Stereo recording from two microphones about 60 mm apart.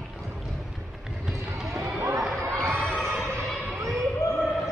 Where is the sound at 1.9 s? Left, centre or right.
Right.